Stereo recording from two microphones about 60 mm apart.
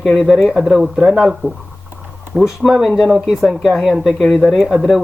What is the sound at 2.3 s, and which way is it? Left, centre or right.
Speech, centre.